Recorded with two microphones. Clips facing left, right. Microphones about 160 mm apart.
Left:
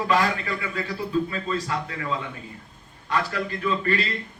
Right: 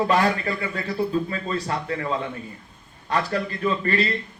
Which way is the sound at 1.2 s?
40° right (ahead or behind).